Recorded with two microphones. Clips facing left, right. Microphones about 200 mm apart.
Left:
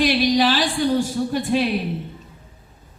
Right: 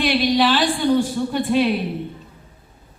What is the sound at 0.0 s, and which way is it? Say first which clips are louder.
Speech: even; 55° right (ahead or behind).